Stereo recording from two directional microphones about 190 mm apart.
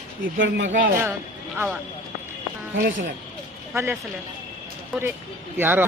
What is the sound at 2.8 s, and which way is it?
Speech, 50° right (ahead or behind).